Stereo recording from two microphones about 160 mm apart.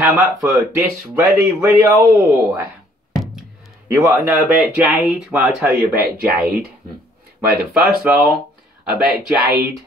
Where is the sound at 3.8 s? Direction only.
15° right (ahead or behind).